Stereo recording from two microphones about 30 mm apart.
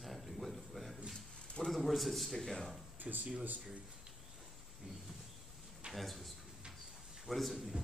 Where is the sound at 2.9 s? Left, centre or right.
Right.